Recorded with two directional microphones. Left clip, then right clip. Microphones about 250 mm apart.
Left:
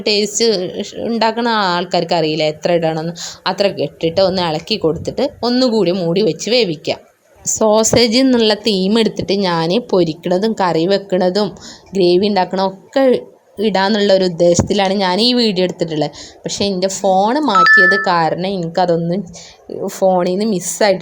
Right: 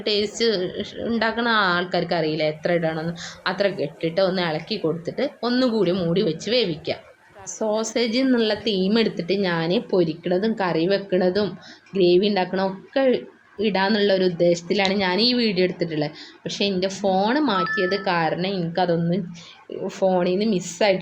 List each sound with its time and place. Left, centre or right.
0.0 s a woman's voice: left